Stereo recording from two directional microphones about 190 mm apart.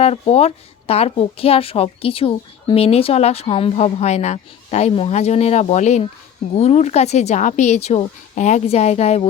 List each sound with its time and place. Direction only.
0.0 s a woman's voice: 35° left (ahead or behind)